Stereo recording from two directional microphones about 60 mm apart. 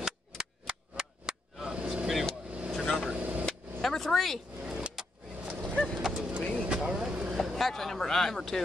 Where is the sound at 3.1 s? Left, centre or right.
Right.